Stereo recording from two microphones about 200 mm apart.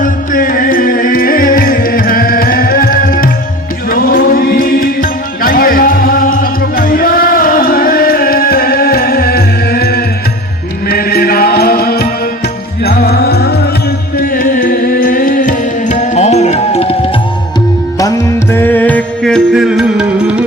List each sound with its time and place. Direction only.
0.0 s music: 45° left (ahead or behind)
18.5 s music: 10° left (ahead or behind); by 20.4 s 5° right (ahead or behind)